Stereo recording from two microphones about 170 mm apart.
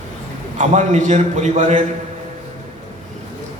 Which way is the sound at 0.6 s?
45° right (ahead or behind).